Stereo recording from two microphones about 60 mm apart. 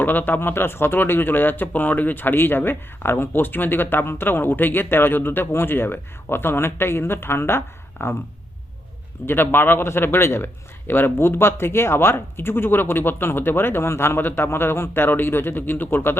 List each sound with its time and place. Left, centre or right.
0.0 s speech: left
9.2 s speech: left